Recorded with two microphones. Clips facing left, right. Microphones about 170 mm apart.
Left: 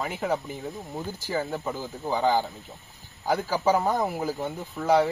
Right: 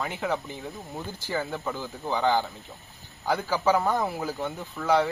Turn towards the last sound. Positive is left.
turn(degrees=20)  # may be behind; listen again after turning